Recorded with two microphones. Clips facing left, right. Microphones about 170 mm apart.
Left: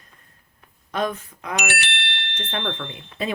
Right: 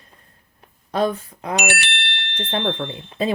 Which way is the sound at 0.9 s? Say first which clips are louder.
Right 4 dB; 30° right (ahead or behind).